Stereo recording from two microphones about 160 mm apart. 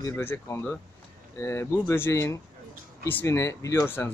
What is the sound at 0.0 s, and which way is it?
A man's voice, 15° left (ahead or behind).